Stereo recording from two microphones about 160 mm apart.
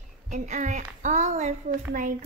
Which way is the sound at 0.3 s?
50° right (ahead or behind).